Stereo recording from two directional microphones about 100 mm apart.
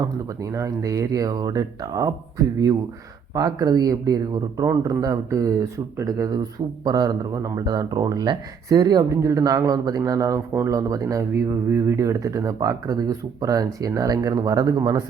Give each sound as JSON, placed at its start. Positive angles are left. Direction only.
{"t": 0.0, "sound": "speech", "side_deg": -35}
{"t": 3.3, "sound": "speech", "side_deg": -35}